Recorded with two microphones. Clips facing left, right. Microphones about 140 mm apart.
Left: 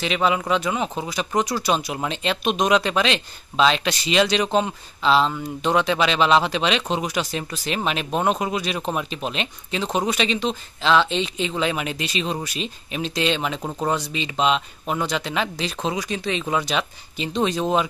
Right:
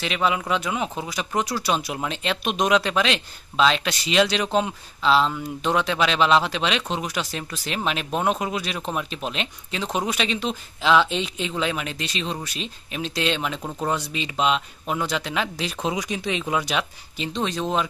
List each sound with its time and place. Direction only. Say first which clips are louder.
0.0 s speech: left 2 dB; centre (ahead or behind)
13.6 s speech: left 3 dB; 15° left (ahead or behind)
13.8 s speech: left 2 dB; centre (ahead or behind)